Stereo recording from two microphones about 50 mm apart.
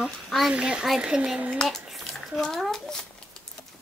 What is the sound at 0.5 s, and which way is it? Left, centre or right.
Speech, centre.